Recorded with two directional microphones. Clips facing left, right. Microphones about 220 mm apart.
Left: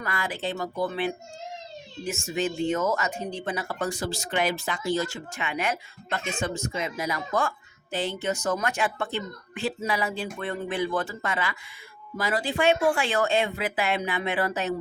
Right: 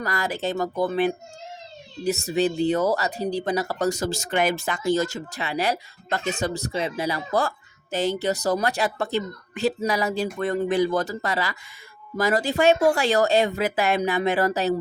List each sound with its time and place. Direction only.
0.0 s speech: 40° right (ahead or behind)